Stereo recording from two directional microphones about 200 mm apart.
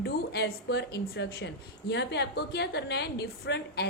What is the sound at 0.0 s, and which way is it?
A woman's voice, 55° left (ahead or behind).